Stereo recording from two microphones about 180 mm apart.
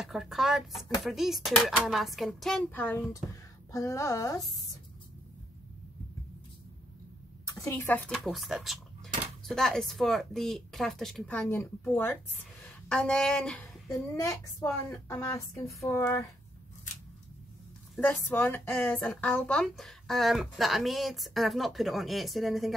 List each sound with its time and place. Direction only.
0.0 s a woman's voice: centre (ahead or behind); by 4.4 s 20° left (ahead or behind)
7.5 s a woman's voice: 15° left (ahead or behind)
14.1 s a woman's voice: 20° left (ahead or behind)
18.0 s speech: 10° left (ahead or behind)